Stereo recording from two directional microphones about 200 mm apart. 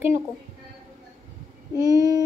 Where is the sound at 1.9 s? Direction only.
15° right (ahead or behind).